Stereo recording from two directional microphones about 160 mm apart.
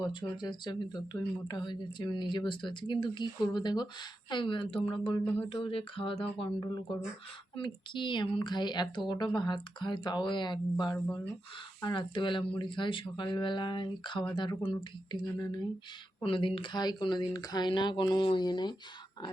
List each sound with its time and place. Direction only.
0.0 s speech: 30° left (ahead or behind)
4.3 s a sound: 30° left (ahead or behind)
7.5 s speech: 30° left (ahead or behind)